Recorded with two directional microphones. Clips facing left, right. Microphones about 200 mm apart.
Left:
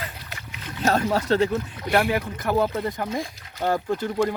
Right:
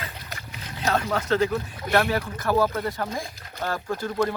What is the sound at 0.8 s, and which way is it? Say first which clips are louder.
Speech: left 3 dB; 35° left (ahead or behind).